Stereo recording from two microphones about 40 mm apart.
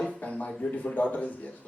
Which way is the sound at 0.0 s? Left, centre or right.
Left.